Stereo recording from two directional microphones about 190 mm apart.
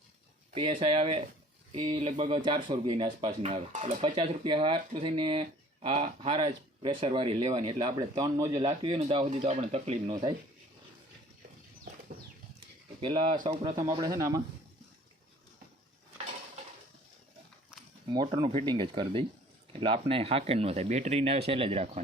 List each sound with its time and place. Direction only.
0.5 s speech: 25° right (ahead or behind)
9.0 s speech: 30° right (ahead or behind)
13.0 s speech: 25° right (ahead or behind)
18.1 s speech: 20° right (ahead or behind)